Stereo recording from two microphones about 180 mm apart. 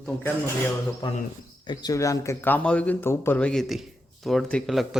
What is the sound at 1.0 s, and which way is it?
A man's voice, 25° left (ahead or behind).